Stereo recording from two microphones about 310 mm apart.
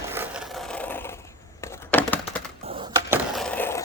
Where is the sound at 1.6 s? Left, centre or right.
Centre.